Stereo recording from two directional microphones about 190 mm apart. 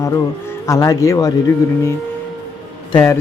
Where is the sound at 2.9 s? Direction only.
15° left (ahead or behind).